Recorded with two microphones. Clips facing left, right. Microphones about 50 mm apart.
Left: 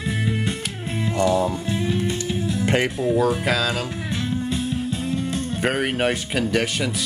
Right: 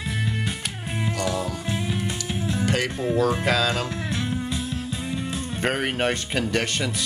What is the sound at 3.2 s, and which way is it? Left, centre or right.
Speech, centre.